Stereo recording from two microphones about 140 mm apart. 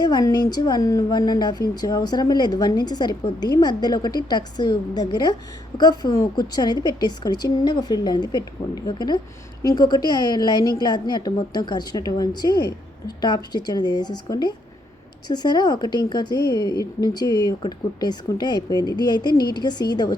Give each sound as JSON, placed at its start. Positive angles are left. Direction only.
{"t": 0.0, "sound": "a woman's voice", "side_deg": 30}